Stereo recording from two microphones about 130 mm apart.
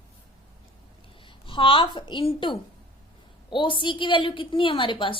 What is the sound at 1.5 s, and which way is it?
A woman's voice, 40° left (ahead or behind).